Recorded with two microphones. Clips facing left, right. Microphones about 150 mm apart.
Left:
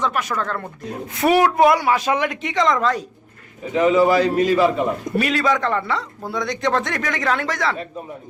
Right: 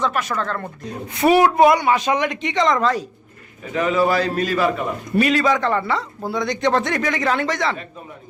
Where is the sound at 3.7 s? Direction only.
20° left (ahead or behind).